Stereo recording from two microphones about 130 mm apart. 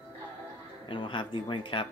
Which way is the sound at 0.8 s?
40° left (ahead or behind).